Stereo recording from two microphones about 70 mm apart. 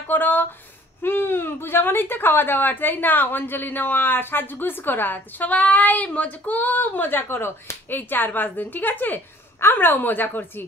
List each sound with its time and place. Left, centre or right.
0.1 s speech: left